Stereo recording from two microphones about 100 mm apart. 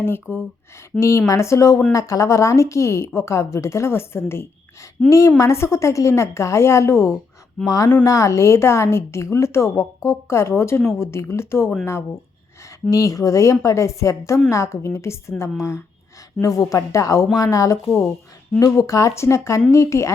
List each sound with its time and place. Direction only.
0.0 s a woman's voice: 25° left (ahead or behind)
12.9 s a woman's voice: 35° left (ahead or behind)